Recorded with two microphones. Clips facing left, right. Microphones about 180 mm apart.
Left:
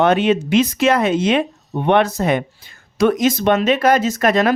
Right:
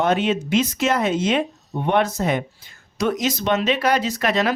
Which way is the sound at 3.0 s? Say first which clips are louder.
Left 7 dB; 55° left (ahead or behind).